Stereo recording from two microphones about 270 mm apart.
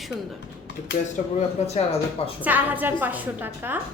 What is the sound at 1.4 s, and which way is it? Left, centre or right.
Speech, left.